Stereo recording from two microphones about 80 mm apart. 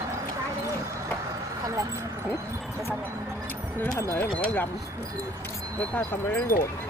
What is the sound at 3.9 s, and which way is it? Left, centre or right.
Speech, left.